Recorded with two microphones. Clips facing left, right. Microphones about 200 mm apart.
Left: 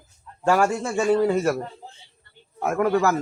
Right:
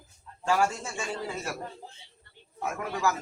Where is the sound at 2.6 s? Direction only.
60° left (ahead or behind).